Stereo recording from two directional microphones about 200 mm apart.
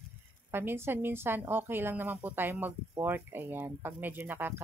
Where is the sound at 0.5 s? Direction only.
10° right (ahead or behind).